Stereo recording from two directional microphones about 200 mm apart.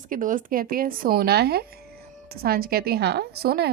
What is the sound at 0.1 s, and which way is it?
A woman's voice, 40° right (ahead or behind).